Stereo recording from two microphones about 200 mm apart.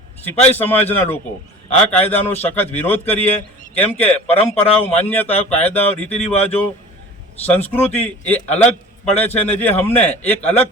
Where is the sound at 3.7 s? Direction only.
10° left (ahead or behind).